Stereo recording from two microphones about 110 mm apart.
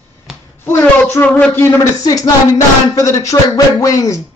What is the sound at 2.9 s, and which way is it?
A man's voice, 30° left (ahead or behind).